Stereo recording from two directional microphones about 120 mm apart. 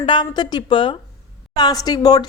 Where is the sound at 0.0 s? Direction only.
40° left (ahead or behind).